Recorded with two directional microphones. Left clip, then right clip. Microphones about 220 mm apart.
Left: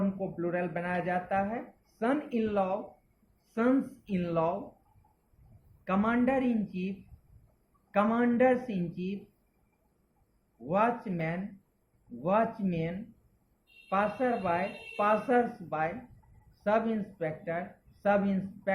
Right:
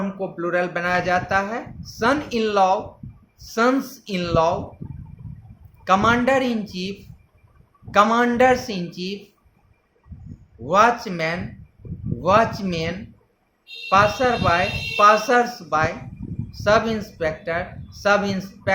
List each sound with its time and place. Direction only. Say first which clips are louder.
0.2 s speech: right 10 dB; 45° right (ahead or behind)
5.8 s speech: right 12 dB; 45° right (ahead or behind)
7.9 s speech: right 12 dB; 45° right (ahead or behind)
10.7 s speech: right 12 dB; 40° right (ahead or behind)
13.9 s speech: right 12 dB; 40° right (ahead or behind)